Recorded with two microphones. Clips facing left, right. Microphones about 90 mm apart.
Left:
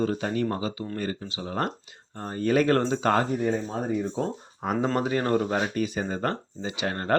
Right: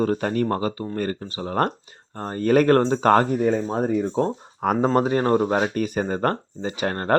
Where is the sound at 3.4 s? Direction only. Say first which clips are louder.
Right 6 dB; 65° right (ahead or behind).